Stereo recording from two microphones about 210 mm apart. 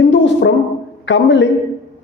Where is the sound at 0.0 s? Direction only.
60° left (ahead or behind).